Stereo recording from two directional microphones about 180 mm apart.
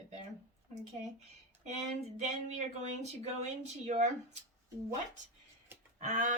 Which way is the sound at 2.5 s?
40° right (ahead or behind).